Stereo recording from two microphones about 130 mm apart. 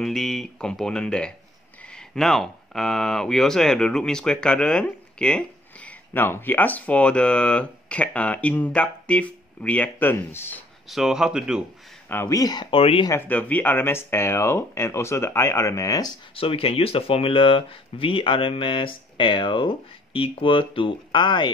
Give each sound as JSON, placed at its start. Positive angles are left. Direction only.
{"t": 0.0, "sound": "speech", "side_deg": 5}
{"t": 10.9, "sound": "speech", "side_deg": -5}
{"t": 12.1, "sound": "speech", "side_deg": 20}
{"t": 12.7, "sound": "speech", "side_deg": 45}
{"t": 13.1, "sound": "speech", "side_deg": 10}
{"t": 16.3, "sound": "speech", "side_deg": 45}